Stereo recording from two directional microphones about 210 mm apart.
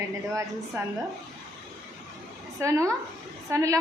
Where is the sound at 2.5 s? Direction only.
15° right (ahead or behind).